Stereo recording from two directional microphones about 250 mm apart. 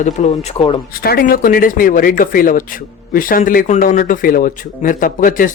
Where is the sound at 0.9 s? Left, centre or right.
Left.